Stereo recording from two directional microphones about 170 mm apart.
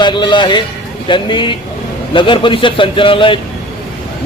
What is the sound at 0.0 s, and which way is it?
Speech, 25° left (ahead or behind).